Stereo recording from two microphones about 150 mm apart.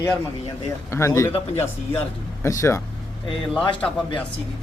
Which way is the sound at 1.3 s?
45° left (ahead or behind).